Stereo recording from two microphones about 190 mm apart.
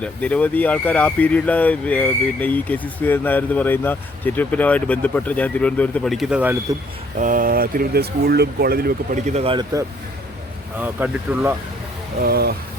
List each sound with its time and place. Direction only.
0.0 s speech: 5° left (ahead or behind)
7.2 s speech: 45° right (ahead or behind)
9.2 s speech: 30° right (ahead or behind)
10.8 s speech: 10° right (ahead or behind)
12.2 s speech: 55° right (ahead or behind)